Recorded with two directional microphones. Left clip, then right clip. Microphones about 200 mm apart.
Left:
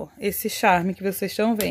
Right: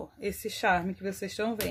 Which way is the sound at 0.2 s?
45° left (ahead or behind).